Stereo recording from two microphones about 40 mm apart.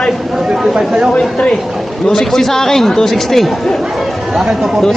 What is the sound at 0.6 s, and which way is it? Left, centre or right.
Speech, centre.